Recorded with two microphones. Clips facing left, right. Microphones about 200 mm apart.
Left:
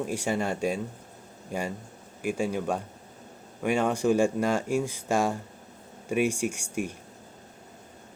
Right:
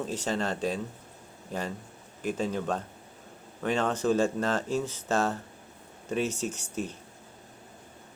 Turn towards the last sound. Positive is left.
turn(degrees=10)  # may be behind; listen again after turning